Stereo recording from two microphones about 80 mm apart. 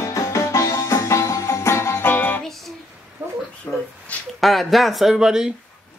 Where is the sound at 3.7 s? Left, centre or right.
Left.